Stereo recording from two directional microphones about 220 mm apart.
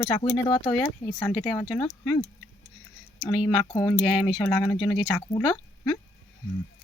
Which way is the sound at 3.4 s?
20° left (ahead or behind).